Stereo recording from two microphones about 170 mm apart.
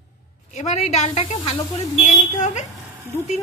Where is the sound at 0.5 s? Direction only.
40° left (ahead or behind).